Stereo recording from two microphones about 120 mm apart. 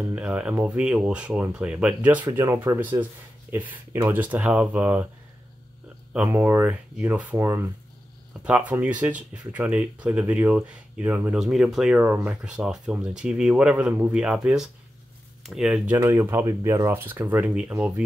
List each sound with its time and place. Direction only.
0.1 s speech: 10° right (ahead or behind); by 2.8 s 25° right (ahead or behind)
2.8 s speech: 15° right (ahead or behind)
6.1 s speech: 15° right (ahead or behind)
8.3 s speech: 10° right (ahead or behind)
11.3 s speech: 5° right (ahead or behind)
16.0 s speech: 25° right (ahead or behind)